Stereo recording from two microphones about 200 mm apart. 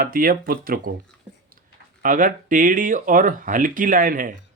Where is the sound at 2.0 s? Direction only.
40° right (ahead or behind).